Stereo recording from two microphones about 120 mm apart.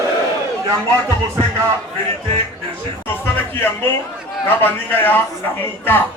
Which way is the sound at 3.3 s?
15° left (ahead or behind).